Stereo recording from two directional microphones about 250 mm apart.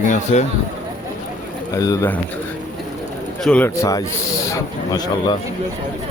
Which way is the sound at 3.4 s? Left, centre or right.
Centre.